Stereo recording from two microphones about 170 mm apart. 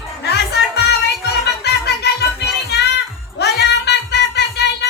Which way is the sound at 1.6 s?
75° left (ahead or behind).